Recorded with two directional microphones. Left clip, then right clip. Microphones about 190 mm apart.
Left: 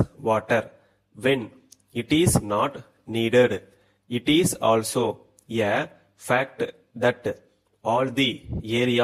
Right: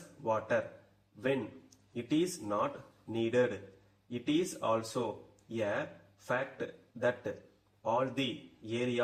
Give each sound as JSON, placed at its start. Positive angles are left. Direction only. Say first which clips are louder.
{"t": 0.2, "sound": "a man's voice", "louder": "left 9 dB", "side_deg": 40}